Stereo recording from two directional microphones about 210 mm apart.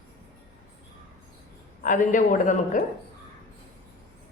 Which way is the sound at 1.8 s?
40° left (ahead or behind).